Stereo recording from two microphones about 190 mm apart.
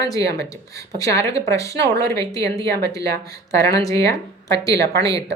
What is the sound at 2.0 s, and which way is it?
Speech, 20° left (ahead or behind).